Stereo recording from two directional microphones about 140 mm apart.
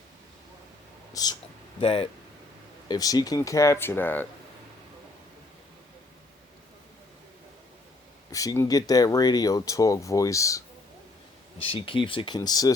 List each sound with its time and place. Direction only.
1.1 s speech: 30° left (ahead or behind)
1.8 s speech: 45° left (ahead or behind)
2.9 s speech: 25° left (ahead or behind)
8.3 s speech: 25° left (ahead or behind)
11.6 s speech: 40° left (ahead or behind)